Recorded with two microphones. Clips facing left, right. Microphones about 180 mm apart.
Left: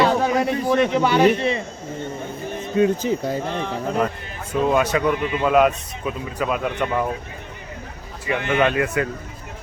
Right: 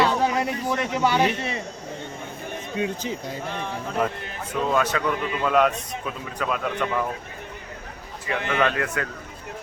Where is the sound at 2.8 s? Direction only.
45° left (ahead or behind).